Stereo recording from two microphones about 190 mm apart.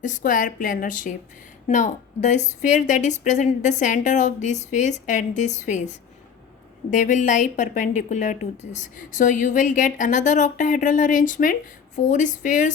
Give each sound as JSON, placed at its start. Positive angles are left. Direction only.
{"t": 0.0, "sound": "a woman's voice", "side_deg": 45}
{"t": 6.9, "sound": "a woman's voice", "side_deg": 40}